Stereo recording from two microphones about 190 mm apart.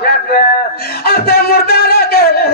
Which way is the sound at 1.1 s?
55° left (ahead or behind).